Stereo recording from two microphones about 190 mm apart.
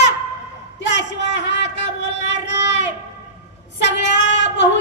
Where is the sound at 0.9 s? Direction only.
70° left (ahead or behind).